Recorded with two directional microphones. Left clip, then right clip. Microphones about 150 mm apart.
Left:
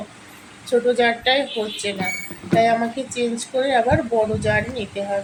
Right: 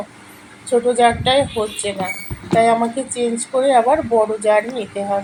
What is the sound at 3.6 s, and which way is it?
Speech, 5° right (ahead or behind).